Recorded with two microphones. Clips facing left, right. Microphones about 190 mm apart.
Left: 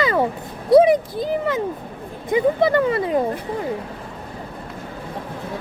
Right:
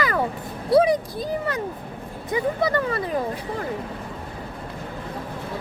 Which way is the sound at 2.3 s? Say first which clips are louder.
Left 6 dB; 25° left (ahead or behind).